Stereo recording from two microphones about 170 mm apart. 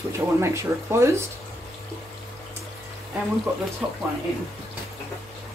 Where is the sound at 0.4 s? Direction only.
15° right (ahead or behind).